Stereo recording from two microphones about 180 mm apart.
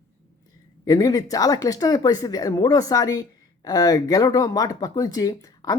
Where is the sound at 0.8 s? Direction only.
20° left (ahead or behind).